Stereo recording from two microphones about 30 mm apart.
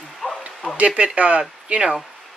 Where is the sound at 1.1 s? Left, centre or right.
Right.